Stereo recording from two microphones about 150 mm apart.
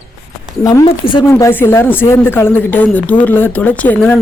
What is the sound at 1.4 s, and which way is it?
Speech, 15° left (ahead or behind).